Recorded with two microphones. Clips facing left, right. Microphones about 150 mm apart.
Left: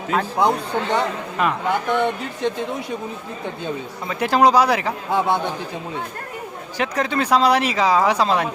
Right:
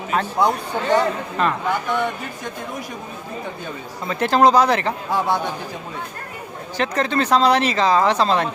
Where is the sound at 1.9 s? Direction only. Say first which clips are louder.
Left 2 dB; 20° left (ahead or behind).